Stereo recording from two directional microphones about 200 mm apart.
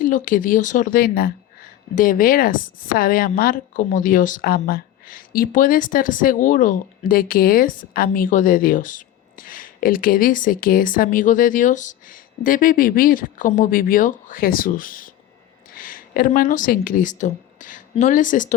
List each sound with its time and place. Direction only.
0.0 s a woman's voice: 40° left (ahead or behind)